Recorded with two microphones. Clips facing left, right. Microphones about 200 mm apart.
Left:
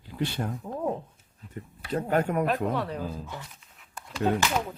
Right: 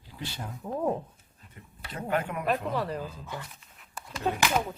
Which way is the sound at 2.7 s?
Centre (ahead or behind).